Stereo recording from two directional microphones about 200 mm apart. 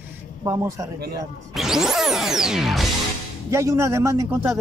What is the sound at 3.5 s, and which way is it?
Speech, 15° right (ahead or behind).